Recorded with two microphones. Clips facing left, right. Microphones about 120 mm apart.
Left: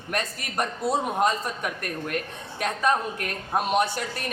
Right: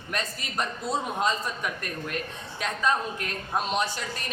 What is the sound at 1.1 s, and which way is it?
A man's voice, 55° left (ahead or behind).